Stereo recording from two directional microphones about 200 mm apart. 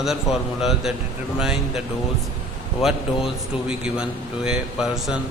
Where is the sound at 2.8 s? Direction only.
Centre (ahead or behind).